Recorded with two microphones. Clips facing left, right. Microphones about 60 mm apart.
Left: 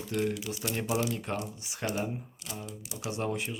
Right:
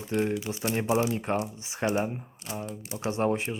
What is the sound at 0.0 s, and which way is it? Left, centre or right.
Speech, right.